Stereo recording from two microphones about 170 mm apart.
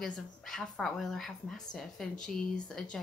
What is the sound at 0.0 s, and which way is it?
A woman's voice, centre (ahead or behind).